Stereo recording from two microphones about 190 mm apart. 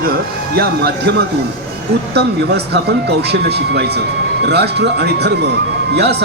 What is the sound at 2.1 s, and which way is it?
Speech, 60° right (ahead or behind).